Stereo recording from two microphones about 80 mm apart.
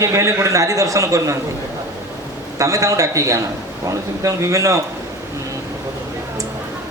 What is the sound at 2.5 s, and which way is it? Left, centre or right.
A man's voice, right.